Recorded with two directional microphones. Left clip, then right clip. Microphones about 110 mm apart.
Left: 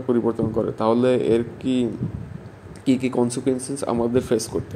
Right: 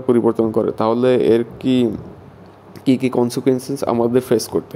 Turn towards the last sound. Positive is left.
turn(degrees=-30)  # may be behind; listen again after turning